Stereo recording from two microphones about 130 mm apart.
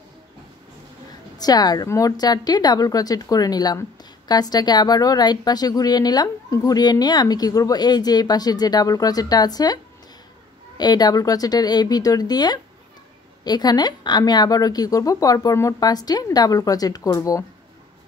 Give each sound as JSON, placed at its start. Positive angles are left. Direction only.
{"t": 1.4, "sound": "a woman's voice", "side_deg": 30}
{"t": 10.8, "sound": "a woman's voice", "side_deg": 35}